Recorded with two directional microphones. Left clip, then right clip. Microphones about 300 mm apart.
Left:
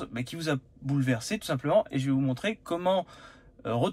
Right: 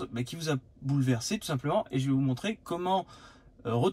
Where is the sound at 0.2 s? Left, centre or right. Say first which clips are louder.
Left 3 dB; centre.